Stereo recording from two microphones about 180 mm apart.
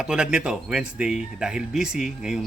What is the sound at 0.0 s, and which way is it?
Speech, 5° right (ahead or behind).